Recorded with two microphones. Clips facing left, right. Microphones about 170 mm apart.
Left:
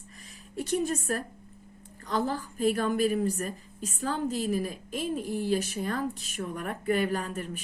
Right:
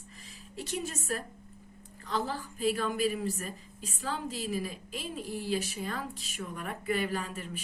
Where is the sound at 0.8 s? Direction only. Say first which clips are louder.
Left 6 dB; 55° left (ahead or behind).